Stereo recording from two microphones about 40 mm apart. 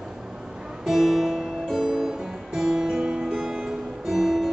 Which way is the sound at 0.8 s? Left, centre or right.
Centre.